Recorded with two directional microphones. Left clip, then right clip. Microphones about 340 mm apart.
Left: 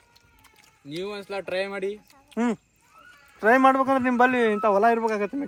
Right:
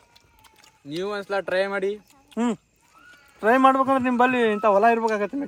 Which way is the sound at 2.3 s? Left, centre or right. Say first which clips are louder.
Even; centre.